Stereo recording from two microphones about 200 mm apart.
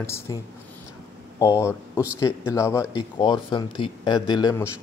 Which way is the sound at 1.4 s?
15° left (ahead or behind).